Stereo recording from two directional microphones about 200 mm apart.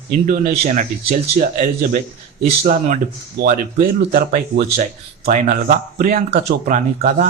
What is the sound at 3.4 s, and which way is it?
Speech, 45° right (ahead or behind).